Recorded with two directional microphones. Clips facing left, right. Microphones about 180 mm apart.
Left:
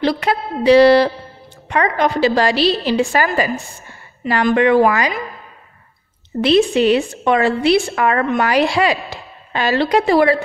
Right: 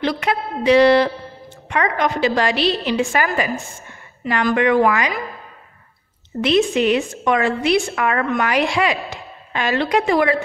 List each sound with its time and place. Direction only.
0.0 s a woman's voice: 35° left (ahead or behind)
6.4 s a woman's voice: 35° left (ahead or behind)